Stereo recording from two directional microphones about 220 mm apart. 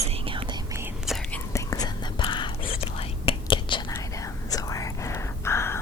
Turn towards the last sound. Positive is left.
turn(degrees=10)  # may be behind; listen again after turning